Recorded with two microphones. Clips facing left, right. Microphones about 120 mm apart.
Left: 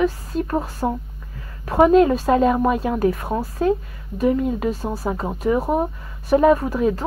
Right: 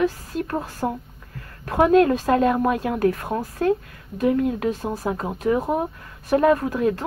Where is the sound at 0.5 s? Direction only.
10° left (ahead or behind).